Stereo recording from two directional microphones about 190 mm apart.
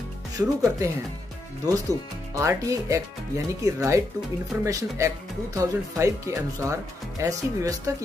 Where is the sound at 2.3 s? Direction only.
15° right (ahead or behind).